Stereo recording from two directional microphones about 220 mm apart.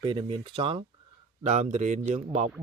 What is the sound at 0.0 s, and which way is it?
A man's voice, 25° right (ahead or behind).